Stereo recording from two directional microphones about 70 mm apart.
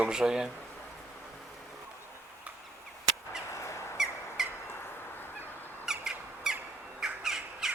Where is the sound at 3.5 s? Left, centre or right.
Left.